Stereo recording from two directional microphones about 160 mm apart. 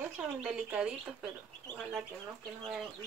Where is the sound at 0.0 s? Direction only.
5° right (ahead or behind).